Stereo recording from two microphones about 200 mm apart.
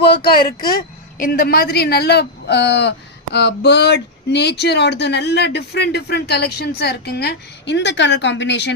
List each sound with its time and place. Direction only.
0.0 s speech: 55° left (ahead or behind)